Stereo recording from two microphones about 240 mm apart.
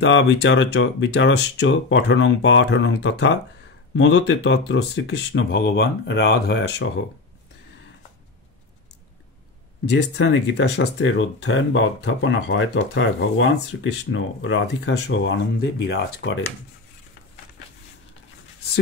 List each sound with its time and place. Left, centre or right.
0.0 s speech: left
9.8 s speech: left